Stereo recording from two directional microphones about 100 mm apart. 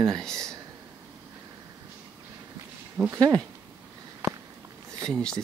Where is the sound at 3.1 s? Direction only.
40° right (ahead or behind).